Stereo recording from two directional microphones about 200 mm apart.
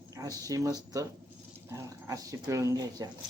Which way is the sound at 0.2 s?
15° right (ahead or behind).